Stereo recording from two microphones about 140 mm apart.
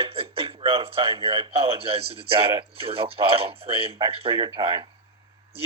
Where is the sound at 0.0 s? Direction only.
40° right (ahead or behind).